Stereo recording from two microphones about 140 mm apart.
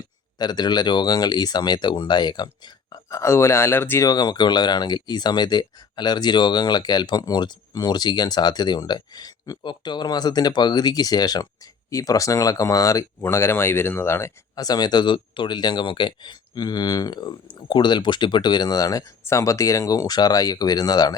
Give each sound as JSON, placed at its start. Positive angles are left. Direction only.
{"t": 0.3, "sound": "speech", "side_deg": 30}